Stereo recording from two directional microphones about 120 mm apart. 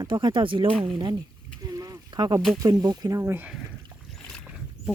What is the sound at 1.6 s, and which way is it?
Rowboat, 30° right (ahead or behind).